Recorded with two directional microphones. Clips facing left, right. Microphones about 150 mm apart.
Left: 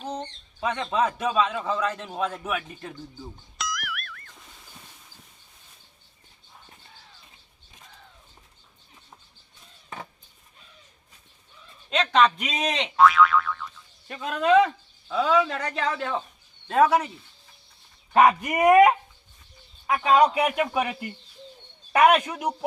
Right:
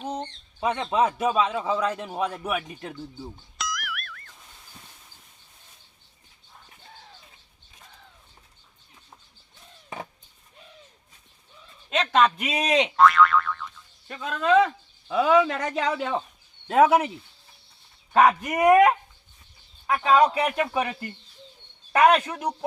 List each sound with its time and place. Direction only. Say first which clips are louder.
0.0 s speech: right 1 dB; 10° right (ahead or behind)
3.6 s music: even; centre (ahead or behind)
11.9 s speech: even; 5° right (ahead or behind)
13.0 s speech: left 2 dB; centre (ahead or behind)
15.0 s speech: right 3 dB; 15° right (ahead or behind)
18.1 s a man's voice: left 1 dB; 5° left (ahead or behind)
19.9 s a man's voice: even; 10° left (ahead or behind)